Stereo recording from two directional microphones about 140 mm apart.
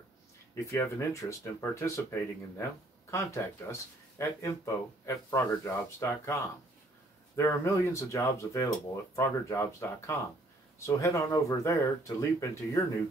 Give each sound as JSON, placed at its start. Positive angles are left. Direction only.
{"t": 0.7, "sound": "speech", "side_deg": 20}
{"t": 7.3, "sound": "speech", "side_deg": 20}